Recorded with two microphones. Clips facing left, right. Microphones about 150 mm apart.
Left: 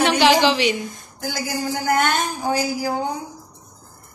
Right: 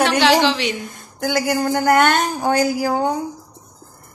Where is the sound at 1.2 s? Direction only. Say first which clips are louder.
Right 7 dB; 65° right (ahead or behind).